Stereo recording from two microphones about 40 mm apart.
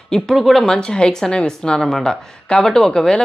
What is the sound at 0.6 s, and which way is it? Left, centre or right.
A woman's voice, centre.